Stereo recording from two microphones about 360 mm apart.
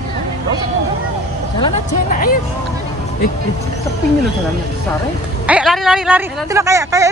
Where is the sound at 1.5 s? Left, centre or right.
Centre.